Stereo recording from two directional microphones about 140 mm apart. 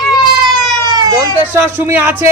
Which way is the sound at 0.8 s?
25° right (ahead or behind).